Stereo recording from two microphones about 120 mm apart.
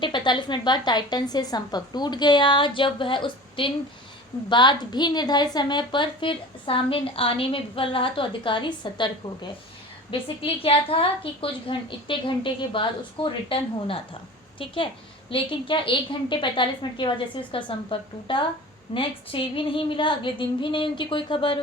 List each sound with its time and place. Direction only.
0.0 s a woman's voice: 40° left (ahead or behind)
15.3 s a woman's voice: 45° left (ahead or behind)